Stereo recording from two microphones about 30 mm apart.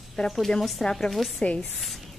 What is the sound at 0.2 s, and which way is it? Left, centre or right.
Speech, centre.